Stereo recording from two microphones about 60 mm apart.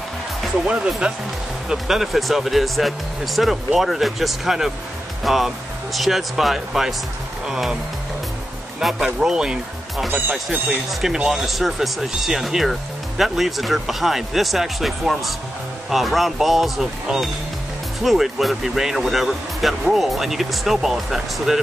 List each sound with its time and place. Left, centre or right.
0.7 s speech: centre
1.7 s speech: centre
9.0 s speech: centre